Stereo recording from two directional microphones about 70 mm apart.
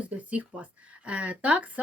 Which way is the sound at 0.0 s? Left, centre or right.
Right.